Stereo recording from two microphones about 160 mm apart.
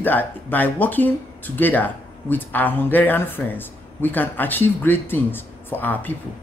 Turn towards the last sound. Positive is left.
turn(degrees=10)  # may be behind; listen again after turning